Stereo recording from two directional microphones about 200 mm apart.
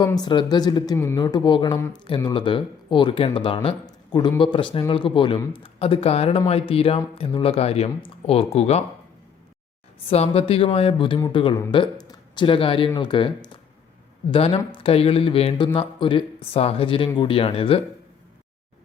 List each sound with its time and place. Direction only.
0.0 s a woman's voice: 20° left (ahead or behind)
10.1 s a woman's voice: 30° left (ahead or behind)